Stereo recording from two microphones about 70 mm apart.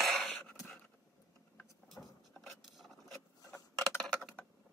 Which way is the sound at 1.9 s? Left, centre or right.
Centre.